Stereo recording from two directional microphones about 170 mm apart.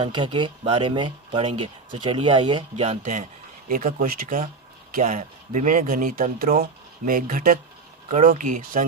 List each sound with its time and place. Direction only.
0.0 s speech: 30° right (ahead or behind); by 3.2 s 45° right (ahead or behind)
3.7 s speech: 55° right (ahead or behind)